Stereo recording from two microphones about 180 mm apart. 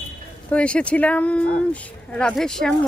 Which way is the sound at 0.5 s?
5° left (ahead or behind).